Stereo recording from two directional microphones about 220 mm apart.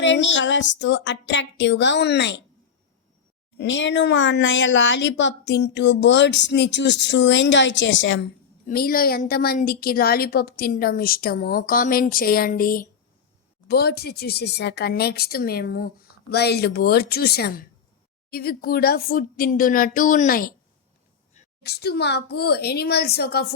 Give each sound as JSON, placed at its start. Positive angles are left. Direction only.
{"t": 0.0, "sound": "speech", "side_deg": 55}
{"t": 3.6, "sound": "speech", "side_deg": 55}
{"t": 8.6, "sound": "a woman's voice", "side_deg": 40}
{"t": 21.6, "sound": "speech", "side_deg": 45}